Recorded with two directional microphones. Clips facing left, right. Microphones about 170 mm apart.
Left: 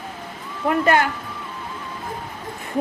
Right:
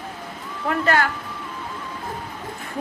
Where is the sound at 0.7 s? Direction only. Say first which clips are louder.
Left 3 dB; 20° left (ahead or behind).